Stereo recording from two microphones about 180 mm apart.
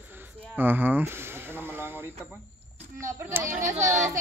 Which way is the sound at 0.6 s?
10° right (ahead or behind).